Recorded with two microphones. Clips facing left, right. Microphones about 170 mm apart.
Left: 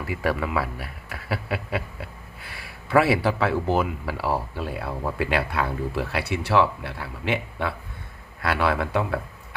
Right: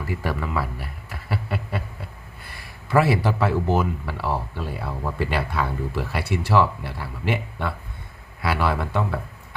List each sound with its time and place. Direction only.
0.1 s speech: centre (ahead or behind)
2.0 s a sound: 85° left
2.9 s speech: 5° left (ahead or behind)